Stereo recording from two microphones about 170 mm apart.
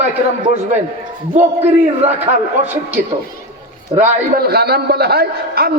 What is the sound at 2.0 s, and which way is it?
Speech, 35° right (ahead or behind).